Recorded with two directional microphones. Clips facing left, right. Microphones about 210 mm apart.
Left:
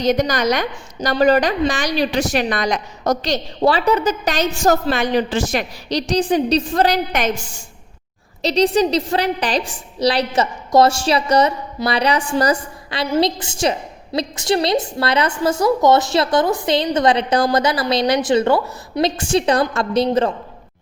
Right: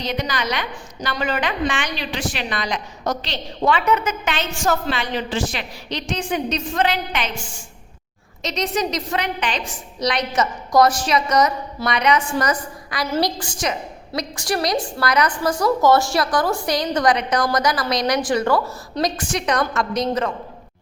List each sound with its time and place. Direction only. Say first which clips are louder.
0.0 s a woman's voice: left 8 dB; 45° left (ahead or behind)
8.4 s a woman's voice: left 8 dB; 35° left (ahead or behind)